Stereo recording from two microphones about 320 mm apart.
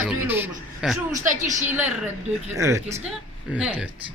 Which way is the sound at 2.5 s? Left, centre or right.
Centre.